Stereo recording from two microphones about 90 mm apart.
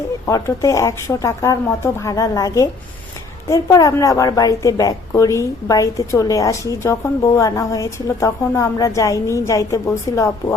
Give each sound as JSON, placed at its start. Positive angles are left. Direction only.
{"t": 0.3, "sound": "a woman's voice", "side_deg": 35}